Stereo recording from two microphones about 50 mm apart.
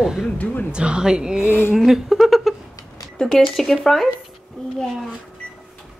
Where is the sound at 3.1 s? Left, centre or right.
Centre.